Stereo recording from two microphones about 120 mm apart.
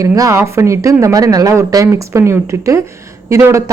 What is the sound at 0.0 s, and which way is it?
Speech, 25° right (ahead or behind).